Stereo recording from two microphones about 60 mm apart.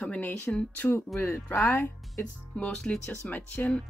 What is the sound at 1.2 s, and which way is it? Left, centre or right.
Speech, left.